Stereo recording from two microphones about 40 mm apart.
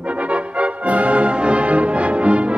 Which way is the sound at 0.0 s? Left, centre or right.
Right.